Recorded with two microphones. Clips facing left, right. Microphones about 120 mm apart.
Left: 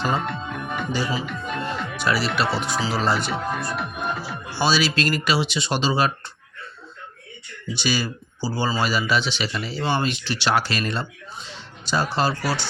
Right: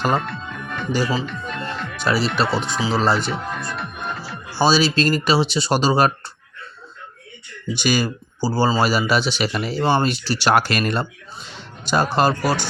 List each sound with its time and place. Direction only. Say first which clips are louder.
0.2 s music: left 1 dB; 15° left (ahead or behind)
1.2 s speech: even; 10° left (ahead or behind)
2.8 s speech: right 5 dB; 25° right (ahead or behind)
3.2 s speech: even; centre (ahead or behind)
4.2 s music: left 1 dB; centre (ahead or behind)
4.6 s speech: right 4 dB; 30° right (ahead or behind)
7.7 s speech: right 4 dB; 50° right (ahead or behind)